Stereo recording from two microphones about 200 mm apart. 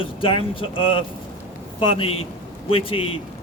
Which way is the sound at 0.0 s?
25° left (ahead or behind).